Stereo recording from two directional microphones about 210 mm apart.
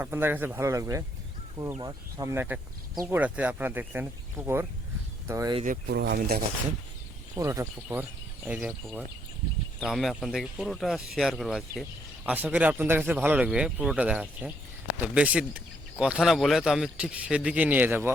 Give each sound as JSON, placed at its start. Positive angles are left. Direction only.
{"t": 0.0, "sound": "speech", "side_deg": -10}
{"t": 5.6, "sound": "speech", "side_deg": -50}
{"t": 7.3, "sound": "speech", "side_deg": -15}